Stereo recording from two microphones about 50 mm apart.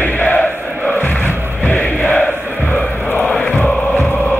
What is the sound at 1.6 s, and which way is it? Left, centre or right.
Crowd, left.